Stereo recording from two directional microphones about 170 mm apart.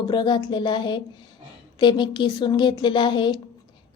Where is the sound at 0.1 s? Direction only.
25° left (ahead or behind).